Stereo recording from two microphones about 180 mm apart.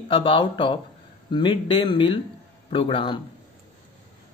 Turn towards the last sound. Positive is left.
turn(degrees=30)  # may be behind; listen again after turning